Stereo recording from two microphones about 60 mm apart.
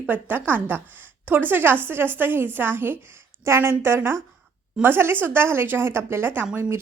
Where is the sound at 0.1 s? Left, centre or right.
Right.